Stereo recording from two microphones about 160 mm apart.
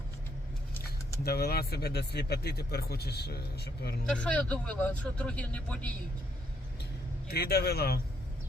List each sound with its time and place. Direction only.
1.2 s speech: 80° left
4.0 s speech: 5° left (ahead or behind)
7.3 s speech: 85° left